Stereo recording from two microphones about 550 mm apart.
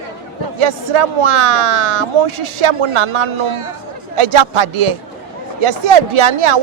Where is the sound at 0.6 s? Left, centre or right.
Right.